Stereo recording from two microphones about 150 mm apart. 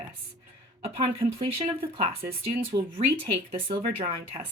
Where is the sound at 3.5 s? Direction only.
35° right (ahead or behind).